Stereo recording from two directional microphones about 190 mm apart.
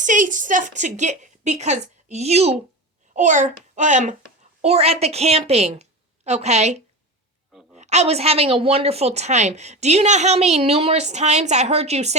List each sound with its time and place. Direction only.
0.0 s a woman's voice: 40° right (ahead or behind)